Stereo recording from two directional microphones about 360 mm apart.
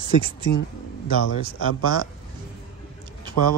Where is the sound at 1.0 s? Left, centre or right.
Left.